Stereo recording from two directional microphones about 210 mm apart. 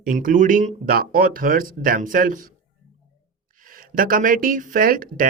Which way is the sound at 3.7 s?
40° right (ahead or behind).